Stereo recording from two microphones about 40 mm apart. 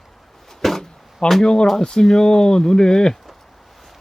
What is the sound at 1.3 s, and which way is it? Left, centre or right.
Speech, centre.